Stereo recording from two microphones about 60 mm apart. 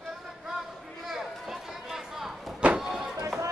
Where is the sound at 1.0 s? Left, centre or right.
Centre.